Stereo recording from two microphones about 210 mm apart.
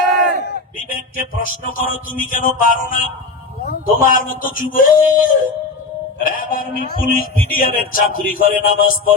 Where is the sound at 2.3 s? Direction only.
40° left (ahead or behind).